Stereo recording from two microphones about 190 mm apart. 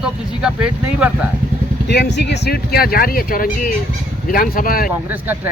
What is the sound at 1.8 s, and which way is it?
Speech, 60° left (ahead or behind).